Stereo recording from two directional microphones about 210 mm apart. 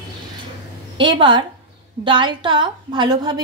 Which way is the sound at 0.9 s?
25° right (ahead or behind).